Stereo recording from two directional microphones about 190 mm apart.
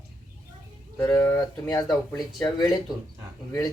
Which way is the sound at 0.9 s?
15° left (ahead or behind).